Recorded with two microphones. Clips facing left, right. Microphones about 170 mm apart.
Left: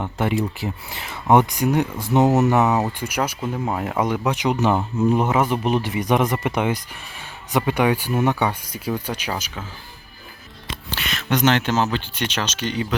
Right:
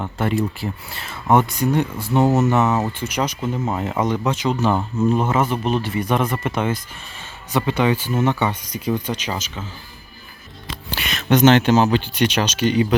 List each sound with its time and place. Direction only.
0.0 s speech: 15° left (ahead or behind)
10.8 s speech: 15° right (ahead or behind)